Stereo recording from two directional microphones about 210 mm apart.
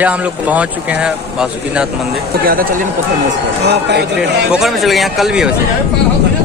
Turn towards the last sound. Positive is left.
turn(degrees=0)  # may be behind; listen again after turning